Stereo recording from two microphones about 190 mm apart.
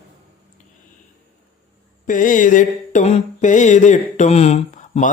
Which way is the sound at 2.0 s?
45° left (ahead or behind).